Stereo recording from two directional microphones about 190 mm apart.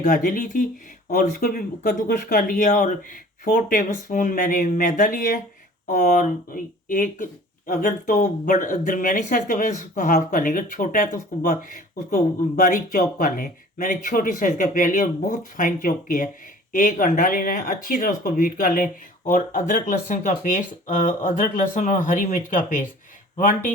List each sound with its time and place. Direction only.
0.0 s speech: 45° left (ahead or behind)